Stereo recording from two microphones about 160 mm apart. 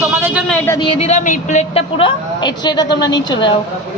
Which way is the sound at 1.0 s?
50° left (ahead or behind).